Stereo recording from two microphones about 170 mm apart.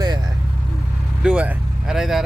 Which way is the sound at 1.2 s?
5° right (ahead or behind).